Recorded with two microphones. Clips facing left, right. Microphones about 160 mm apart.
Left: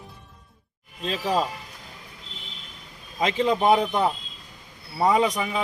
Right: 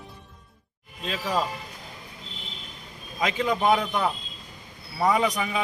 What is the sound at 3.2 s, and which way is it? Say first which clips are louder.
Speech: left 3 dB; 30° left (ahead or behind).